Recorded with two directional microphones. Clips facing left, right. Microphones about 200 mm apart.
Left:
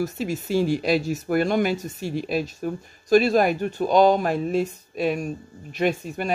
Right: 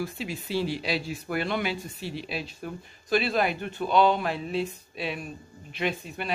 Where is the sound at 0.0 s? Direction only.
45° left (ahead or behind).